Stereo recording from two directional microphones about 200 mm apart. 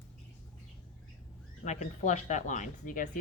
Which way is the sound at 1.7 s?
35° left (ahead or behind).